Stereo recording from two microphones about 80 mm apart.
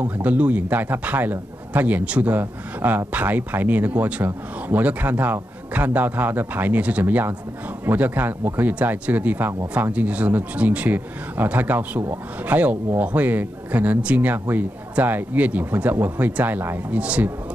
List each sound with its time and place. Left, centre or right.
0.0 s a man's voice: right